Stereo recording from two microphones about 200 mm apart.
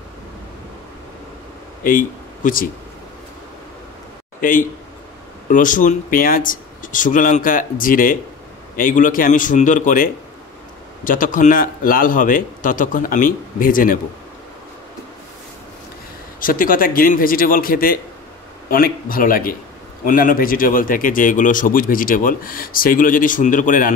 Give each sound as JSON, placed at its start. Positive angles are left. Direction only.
{"t": 1.8, "sound": "speech", "side_deg": 45}
{"t": 4.4, "sound": "a man's voice", "side_deg": 45}
{"t": 11.1, "sound": "speech", "side_deg": 40}
{"t": 16.3, "sound": "speech", "side_deg": 45}